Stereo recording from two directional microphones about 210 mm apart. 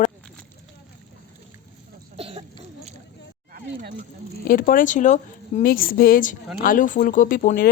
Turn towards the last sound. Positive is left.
turn(degrees=40)  # may be behind; listen again after turning